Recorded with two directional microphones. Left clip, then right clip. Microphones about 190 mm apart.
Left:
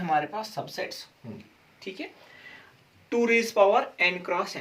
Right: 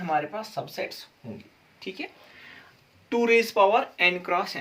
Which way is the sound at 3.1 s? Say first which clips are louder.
Right 2 dB; 40° right (ahead or behind).